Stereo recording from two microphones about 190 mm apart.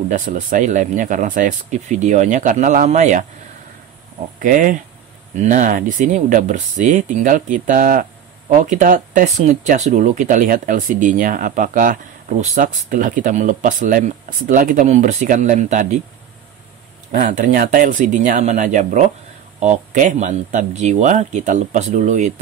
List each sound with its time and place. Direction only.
0.1 s speech: 45° right (ahead or behind)
4.4 s speech: 45° right (ahead or behind)
17.1 s speech: 45° right (ahead or behind)